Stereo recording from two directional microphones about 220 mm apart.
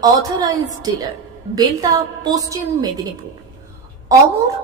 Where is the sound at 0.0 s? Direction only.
15° right (ahead or behind).